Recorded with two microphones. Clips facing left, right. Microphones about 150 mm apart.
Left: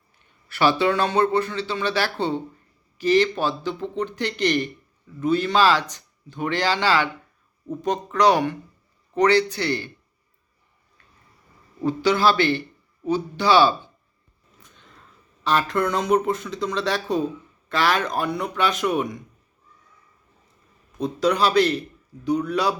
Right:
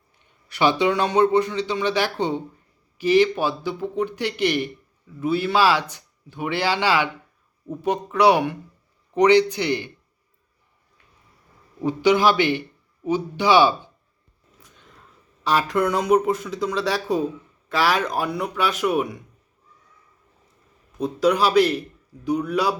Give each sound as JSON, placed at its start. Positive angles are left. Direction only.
{"t": 0.2, "sound": "a man's voice", "side_deg": -20}
{"t": 11.8, "sound": "a man's voice", "side_deg": -15}
{"t": 15.4, "sound": "a man's voice", "side_deg": -10}
{"t": 21.0, "sound": "a man's voice", "side_deg": -10}